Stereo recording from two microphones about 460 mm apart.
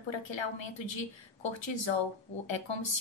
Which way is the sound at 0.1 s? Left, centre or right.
Left.